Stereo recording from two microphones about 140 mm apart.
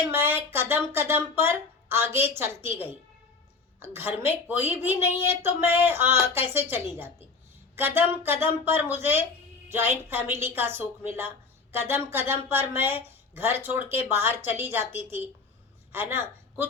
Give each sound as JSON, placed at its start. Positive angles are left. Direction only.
{"t": 0.1, "sound": "a woman's voice", "side_deg": -15}